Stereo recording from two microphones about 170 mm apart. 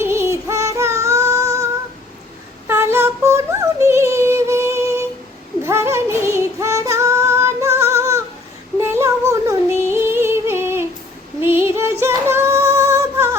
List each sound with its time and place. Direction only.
0.0 s synthetic singing: 15° right (ahead or behind)
2.6 s music: 15° right (ahead or behind)
5.6 s female singing: 15° right (ahead or behind)
8.8 s music: 15° right (ahead or behind)
11.3 s female singing: 15° right (ahead or behind)